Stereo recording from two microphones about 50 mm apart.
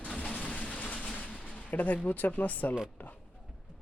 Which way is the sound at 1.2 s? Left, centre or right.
Left.